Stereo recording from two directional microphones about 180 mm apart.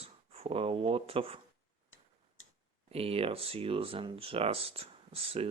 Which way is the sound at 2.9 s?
30° right (ahead or behind).